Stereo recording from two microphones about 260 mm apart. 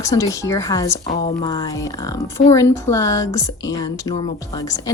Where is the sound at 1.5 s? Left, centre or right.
Centre.